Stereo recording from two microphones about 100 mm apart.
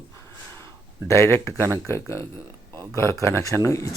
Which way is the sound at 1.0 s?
25° left (ahead or behind).